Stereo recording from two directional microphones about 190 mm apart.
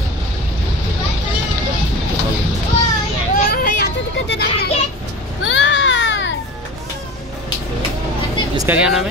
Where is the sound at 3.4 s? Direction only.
55° left (ahead or behind).